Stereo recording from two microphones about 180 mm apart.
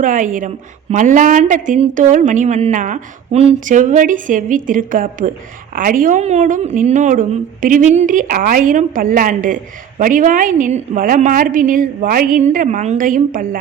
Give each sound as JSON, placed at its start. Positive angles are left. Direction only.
{"t": 0.0, "sound": "a woman's voice", "side_deg": -45}